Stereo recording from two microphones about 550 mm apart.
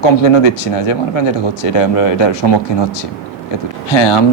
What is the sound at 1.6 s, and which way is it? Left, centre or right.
Speech, left.